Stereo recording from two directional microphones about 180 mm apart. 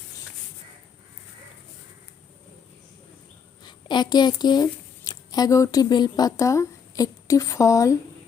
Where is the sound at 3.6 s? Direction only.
25° left (ahead or behind).